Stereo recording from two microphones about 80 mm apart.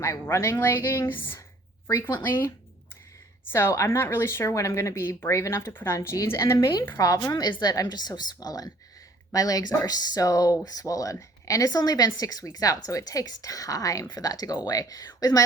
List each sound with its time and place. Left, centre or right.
0.0 s a woman's voice: left
7.0 s speech: left